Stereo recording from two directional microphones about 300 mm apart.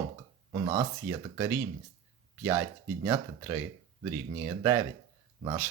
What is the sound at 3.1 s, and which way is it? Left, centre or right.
Speech, centre.